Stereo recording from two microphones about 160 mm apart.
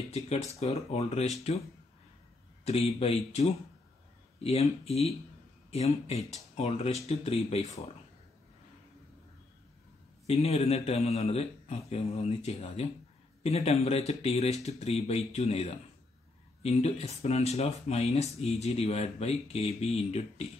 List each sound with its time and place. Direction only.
0.1 s speech: 40° left (ahead or behind)
2.6 s speech: 40° left (ahead or behind)
10.2 s speech: 40° left (ahead or behind)